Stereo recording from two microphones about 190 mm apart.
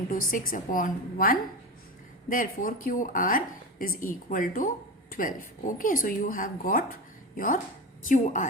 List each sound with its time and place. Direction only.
0.3 s a woman's voice: 45° left (ahead or behind)